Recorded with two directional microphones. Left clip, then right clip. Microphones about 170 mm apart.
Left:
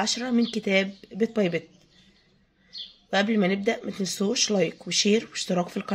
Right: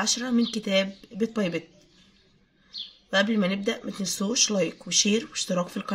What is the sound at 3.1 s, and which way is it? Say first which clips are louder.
Speech: even; 25° left (ahead or behind).